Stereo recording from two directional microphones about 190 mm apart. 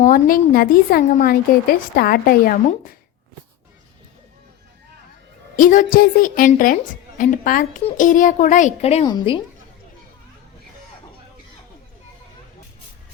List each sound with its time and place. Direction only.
0.0 s a woman's voice: 45° left (ahead or behind)
5.5 s a woman's voice: 45° left (ahead or behind); by 9.4 s 25° left (ahead or behind)